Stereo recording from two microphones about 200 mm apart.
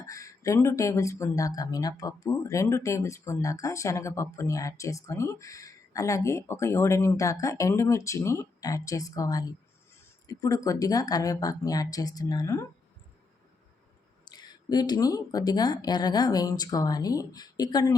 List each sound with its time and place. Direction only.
0.0 s speech: 15° left (ahead or behind)
14.3 s speech: 20° left (ahead or behind)